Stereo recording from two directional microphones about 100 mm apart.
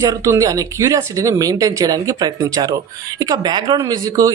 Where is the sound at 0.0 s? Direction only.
30° right (ahead or behind).